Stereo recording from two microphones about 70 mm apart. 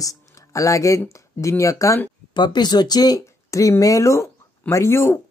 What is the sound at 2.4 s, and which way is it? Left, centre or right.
Speech, left.